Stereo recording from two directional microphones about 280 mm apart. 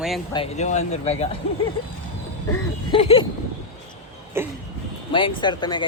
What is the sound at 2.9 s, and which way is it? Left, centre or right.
Speech, centre.